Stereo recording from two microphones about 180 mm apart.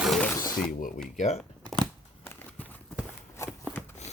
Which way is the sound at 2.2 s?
10° left (ahead or behind).